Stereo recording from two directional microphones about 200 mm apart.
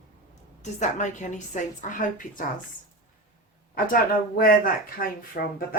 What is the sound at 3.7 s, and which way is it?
Speech, 45° left (ahead or behind).